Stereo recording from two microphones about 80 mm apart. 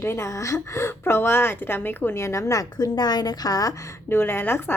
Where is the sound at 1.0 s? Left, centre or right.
Left.